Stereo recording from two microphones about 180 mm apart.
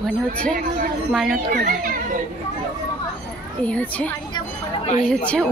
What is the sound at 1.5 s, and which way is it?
Speech, 50° right (ahead or behind).